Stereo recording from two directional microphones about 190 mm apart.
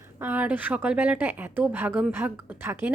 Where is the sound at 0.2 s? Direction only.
10° right (ahead or behind).